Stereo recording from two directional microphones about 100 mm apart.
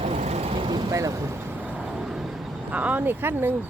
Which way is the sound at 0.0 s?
90° right.